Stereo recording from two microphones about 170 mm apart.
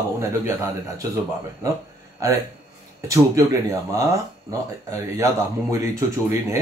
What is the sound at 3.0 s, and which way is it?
Speech, 20° right (ahead or behind).